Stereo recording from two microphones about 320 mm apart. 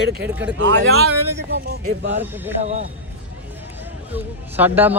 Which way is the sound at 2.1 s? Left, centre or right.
Centre.